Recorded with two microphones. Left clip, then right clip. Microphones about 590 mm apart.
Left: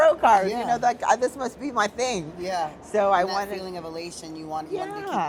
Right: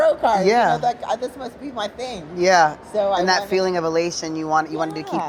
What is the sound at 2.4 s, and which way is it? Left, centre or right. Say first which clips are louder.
A woman's voice: right 16 dB; right.